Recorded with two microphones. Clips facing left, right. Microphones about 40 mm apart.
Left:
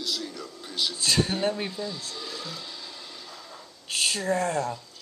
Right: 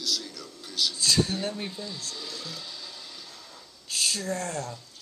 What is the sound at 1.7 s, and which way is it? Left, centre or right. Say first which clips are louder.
Speech: left 3 dB; centre.